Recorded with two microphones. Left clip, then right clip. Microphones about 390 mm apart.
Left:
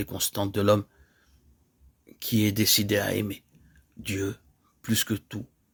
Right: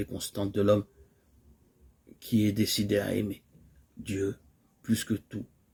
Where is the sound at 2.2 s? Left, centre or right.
Left.